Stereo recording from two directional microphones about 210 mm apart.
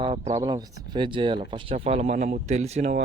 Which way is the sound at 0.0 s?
25° right (ahead or behind).